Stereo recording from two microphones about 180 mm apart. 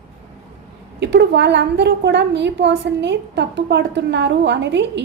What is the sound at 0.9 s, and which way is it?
A woman's voice, 70° right (ahead or behind).